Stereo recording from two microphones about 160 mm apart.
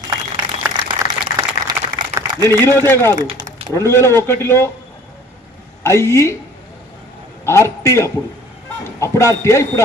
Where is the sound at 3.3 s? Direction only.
25° right (ahead or behind).